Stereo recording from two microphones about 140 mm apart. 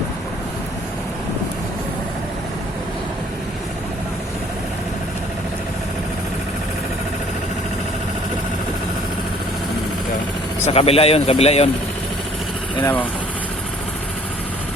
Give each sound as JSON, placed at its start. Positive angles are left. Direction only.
{"t": 10.6, "sound": "speech", "side_deg": 45}
{"t": 12.8, "sound": "speech", "side_deg": 10}